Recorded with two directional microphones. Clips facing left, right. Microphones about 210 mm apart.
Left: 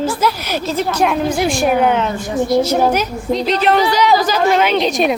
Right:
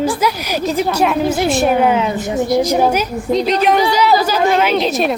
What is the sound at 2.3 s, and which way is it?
A woman's voice, 15° right (ahead or behind).